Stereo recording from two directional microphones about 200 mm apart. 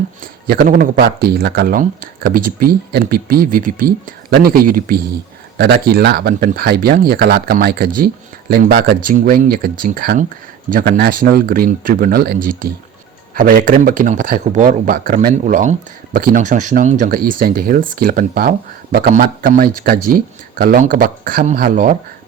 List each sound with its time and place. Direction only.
0.4 s speech: 50° right (ahead or behind)